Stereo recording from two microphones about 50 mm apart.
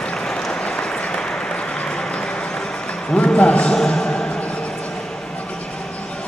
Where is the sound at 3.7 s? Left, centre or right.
Centre.